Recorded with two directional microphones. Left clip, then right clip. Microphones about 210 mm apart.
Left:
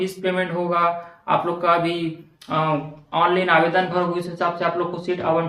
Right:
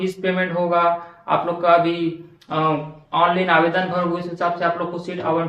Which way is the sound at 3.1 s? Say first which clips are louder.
Right 1 dB; 20° left (ahead or behind).